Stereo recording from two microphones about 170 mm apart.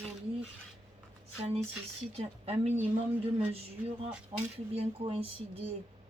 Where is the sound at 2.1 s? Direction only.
40° right (ahead or behind).